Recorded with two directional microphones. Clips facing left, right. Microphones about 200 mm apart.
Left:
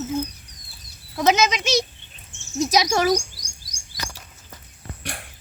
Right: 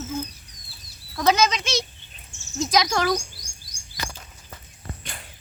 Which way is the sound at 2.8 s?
20° left (ahead or behind).